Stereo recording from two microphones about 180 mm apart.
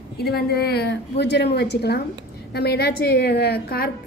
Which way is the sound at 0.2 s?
60° left (ahead or behind).